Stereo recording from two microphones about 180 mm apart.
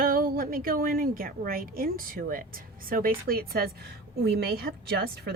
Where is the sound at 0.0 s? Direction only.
55° right (ahead or behind).